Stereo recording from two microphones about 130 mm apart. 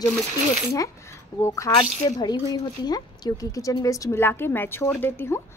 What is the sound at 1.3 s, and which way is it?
Speech, 25° left (ahead or behind).